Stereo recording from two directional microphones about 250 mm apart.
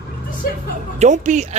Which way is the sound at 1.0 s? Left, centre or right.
Right.